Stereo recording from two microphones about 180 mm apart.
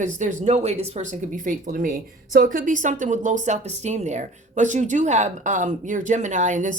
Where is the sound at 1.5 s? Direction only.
50° right (ahead or behind).